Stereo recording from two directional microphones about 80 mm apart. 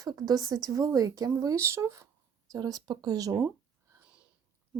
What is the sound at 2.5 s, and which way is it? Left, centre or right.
Speech, right.